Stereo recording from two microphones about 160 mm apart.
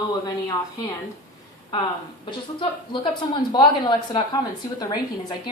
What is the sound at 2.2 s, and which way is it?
Speech, 30° left (ahead or behind).